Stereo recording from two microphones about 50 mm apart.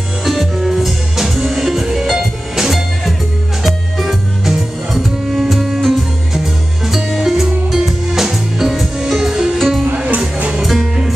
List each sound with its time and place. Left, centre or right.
0.2 s music: centre
9.9 s music: right
10.6 s music: centre